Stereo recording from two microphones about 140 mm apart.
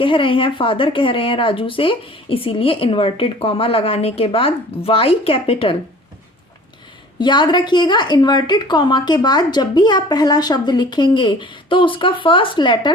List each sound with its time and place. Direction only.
0.0 s speech: 40° left (ahead or behind)
7.2 s speech: 35° left (ahead or behind)